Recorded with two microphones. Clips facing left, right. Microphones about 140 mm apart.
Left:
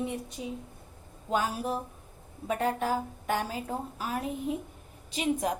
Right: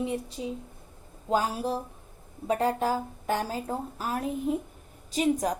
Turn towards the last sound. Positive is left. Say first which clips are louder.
# right 3 dB
turn(degrees=-40)  # may be behind; listen again after turning